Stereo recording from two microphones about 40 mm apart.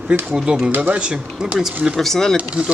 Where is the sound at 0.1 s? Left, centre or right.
Right.